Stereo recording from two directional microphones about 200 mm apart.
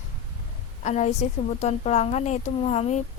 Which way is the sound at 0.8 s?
35° left (ahead or behind).